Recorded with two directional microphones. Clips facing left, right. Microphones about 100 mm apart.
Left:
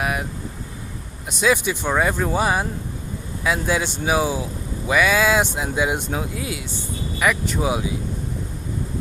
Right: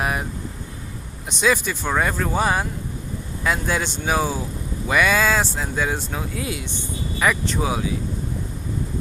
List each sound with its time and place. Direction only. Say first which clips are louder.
0.0 s vehicle: even; 5° left (ahead or behind)
1.3 s speech: left 1 dB; 5° left (ahead or behind)